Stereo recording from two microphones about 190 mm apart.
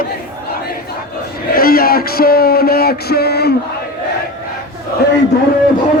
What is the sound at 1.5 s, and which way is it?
Music, 50° left (ahead or behind).